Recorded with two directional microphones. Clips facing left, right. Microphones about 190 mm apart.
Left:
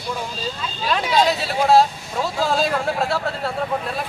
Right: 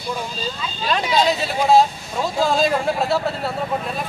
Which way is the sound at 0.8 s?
5° left (ahead or behind).